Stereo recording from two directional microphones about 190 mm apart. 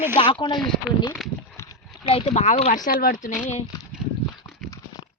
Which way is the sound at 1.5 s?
15° left (ahead or behind).